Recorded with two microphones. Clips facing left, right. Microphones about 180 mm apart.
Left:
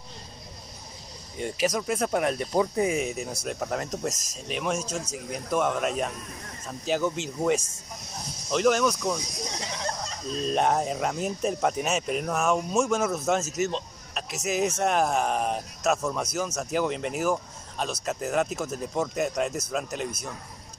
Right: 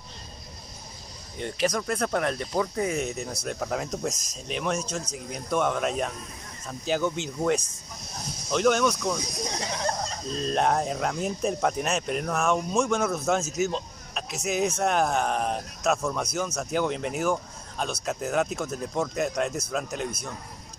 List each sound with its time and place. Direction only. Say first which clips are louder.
1.4 s speech: even; 5° left (ahead or behind)
9.5 s a sound: right 4 dB; 55° right (ahead or behind)
10.4 s speech: even; 5° left (ahead or behind)